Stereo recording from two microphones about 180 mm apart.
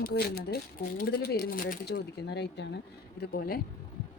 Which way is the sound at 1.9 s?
65° left (ahead or behind).